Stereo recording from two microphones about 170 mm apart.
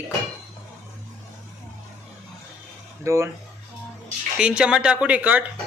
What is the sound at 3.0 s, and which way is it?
Speech, 15° right (ahead or behind).